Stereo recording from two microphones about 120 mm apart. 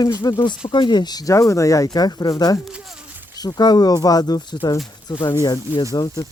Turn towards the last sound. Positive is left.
turn(degrees=30)  # may be behind; listen again after turning